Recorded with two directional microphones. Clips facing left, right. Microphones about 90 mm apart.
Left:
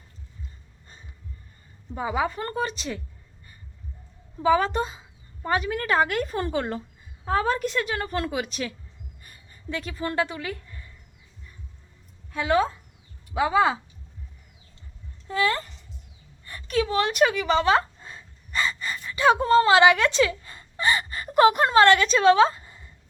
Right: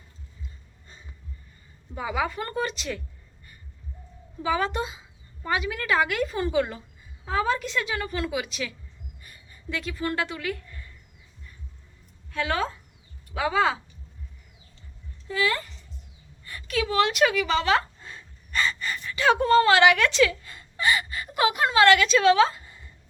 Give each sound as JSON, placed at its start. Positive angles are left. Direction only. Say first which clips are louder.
{"t": 2.0, "sound": "a woman's voice", "louder": "left 2 dB", "side_deg": 30}
{"t": 4.4, "sound": "a woman's voice", "louder": "left 5 dB", "side_deg": 35}
{"t": 9.2, "sound": "a sound", "louder": "left 2 dB", "side_deg": 35}
{"t": 12.3, "sound": "a woman's voice", "louder": "left 4 dB", "side_deg": 15}
{"t": 15.3, "sound": "a woman's voice", "louder": "left 2 dB", "side_deg": 35}